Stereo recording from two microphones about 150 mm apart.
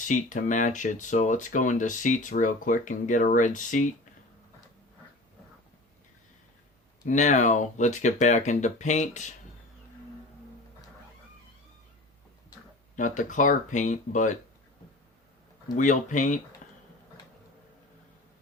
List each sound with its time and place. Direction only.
0.0 s speech: 60° left (ahead or behind)
7.0 s speech: 55° left (ahead or behind)
13.0 s speech: 55° left (ahead or behind)
15.7 s speech: 55° left (ahead or behind)
16.6 s a sound: 60° left (ahead or behind)